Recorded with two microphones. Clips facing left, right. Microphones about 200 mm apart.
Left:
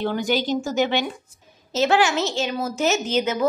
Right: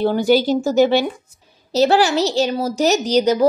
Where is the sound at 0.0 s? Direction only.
35° right (ahead or behind).